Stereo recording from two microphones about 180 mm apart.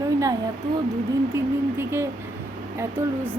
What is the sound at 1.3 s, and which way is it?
A woman's voice, 15° right (ahead or behind).